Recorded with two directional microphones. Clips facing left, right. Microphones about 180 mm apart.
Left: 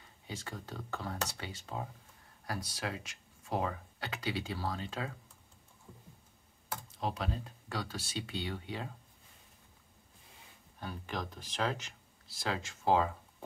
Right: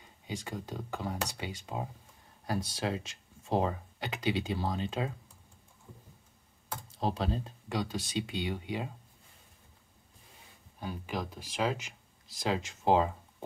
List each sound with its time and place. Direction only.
0.0 s speech: 15° right (ahead or behind)
2.4 s speech: 25° right (ahead or behind)
7.0 s speech: 30° right (ahead or behind)
7.7 s speech: 15° right (ahead or behind)
10.8 s speech: 10° right (ahead or behind)